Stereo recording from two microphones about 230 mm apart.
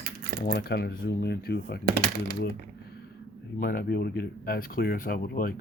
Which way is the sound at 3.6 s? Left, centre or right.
Left.